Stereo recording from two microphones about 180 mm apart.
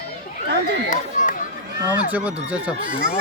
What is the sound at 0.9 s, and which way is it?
Run, 45° left (ahead or behind).